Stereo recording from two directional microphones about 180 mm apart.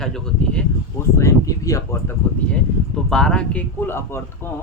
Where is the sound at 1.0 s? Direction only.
15° left (ahead or behind).